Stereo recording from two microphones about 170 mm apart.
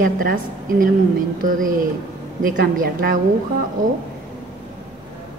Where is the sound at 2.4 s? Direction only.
55° right (ahead or behind).